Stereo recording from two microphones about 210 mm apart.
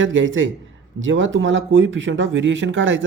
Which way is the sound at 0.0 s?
65° right (ahead or behind).